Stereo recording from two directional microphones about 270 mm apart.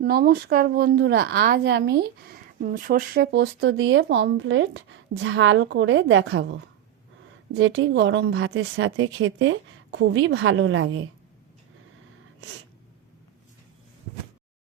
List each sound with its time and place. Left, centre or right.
0.0 s a woman's voice: right